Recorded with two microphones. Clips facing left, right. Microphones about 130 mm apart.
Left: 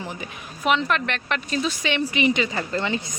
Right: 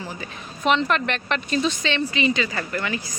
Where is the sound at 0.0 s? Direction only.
20° left (ahead or behind).